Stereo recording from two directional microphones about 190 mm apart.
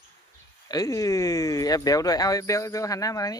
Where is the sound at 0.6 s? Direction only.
20° left (ahead or behind).